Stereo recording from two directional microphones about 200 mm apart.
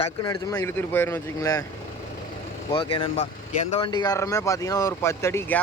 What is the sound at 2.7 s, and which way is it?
Speech, 30° left (ahead or behind).